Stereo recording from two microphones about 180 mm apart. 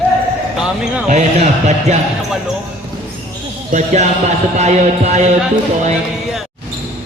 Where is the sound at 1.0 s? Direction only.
40° right (ahead or behind).